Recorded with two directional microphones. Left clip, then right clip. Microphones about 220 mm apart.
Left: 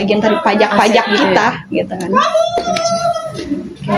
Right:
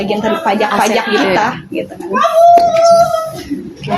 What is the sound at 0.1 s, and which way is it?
Speech, 25° left (ahead or behind).